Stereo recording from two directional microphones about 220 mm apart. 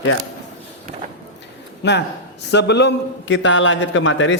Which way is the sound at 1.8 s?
50° left (ahead or behind).